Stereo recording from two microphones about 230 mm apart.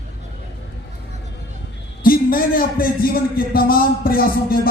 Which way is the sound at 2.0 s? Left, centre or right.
Left.